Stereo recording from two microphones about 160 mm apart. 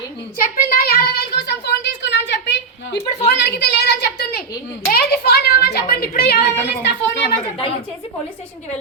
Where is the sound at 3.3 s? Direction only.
90° left.